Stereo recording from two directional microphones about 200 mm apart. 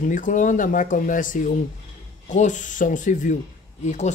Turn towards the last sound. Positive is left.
turn(degrees=35)  # may be behind; listen again after turning